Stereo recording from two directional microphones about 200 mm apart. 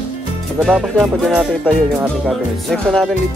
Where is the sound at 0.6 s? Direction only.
Centre (ahead or behind).